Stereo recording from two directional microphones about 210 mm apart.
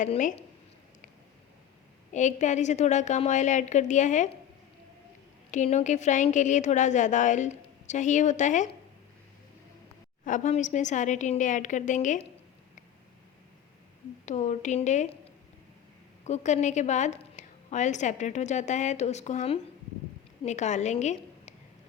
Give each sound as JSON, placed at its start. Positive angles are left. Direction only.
{"t": 0.0, "sound": "a woman's voice", "side_deg": 35}
{"t": 2.1, "sound": "a woman's voice", "side_deg": 35}
{"t": 5.5, "sound": "a woman's voice", "side_deg": 35}
{"t": 10.2, "sound": "a woman's voice", "side_deg": 35}
{"t": 14.3, "sound": "a woman's voice", "side_deg": 35}
{"t": 16.2, "sound": "a woman's voice", "side_deg": 35}